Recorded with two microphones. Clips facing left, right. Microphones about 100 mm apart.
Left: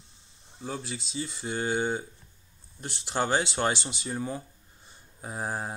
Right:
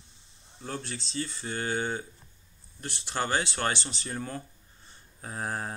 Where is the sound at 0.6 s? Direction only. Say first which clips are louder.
Left 1 dB; 5° left (ahead or behind).